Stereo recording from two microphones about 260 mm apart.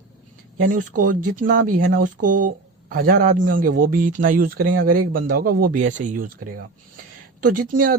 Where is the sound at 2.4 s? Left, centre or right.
Right.